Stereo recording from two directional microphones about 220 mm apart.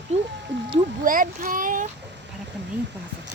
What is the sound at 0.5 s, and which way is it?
Cat, 55° right (ahead or behind).